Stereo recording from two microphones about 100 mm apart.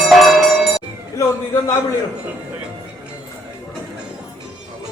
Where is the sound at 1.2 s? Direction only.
30° left (ahead or behind).